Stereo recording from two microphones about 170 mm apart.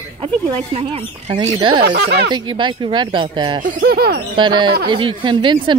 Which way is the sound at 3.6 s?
60° right (ahead or behind).